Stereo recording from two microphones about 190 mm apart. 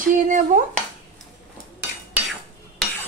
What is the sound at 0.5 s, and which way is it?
Speech, 45° right (ahead or behind).